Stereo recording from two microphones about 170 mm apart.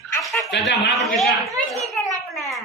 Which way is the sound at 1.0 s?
Centre (ahead or behind).